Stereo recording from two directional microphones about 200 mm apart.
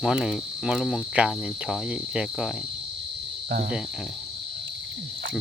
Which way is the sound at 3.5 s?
45° right (ahead or behind).